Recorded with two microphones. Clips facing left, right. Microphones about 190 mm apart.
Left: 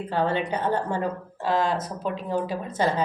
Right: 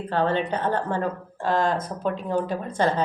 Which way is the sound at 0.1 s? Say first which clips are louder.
Right 2 dB; 10° left (ahead or behind).